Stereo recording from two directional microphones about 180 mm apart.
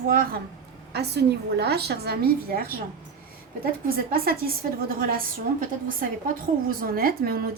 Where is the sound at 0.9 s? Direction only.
65° right (ahead or behind).